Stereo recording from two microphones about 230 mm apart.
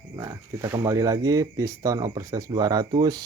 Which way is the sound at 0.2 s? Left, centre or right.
Centre.